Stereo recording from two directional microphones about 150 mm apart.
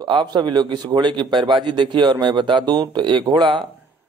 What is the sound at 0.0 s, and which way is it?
A man's voice, 30° right (ahead or behind).